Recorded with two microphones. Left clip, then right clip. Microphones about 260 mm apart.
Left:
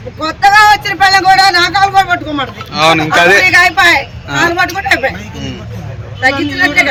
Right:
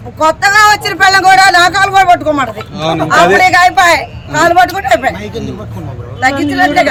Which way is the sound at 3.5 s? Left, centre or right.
Centre.